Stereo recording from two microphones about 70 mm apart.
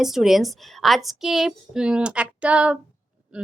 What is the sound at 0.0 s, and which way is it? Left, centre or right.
A woman's voice, centre.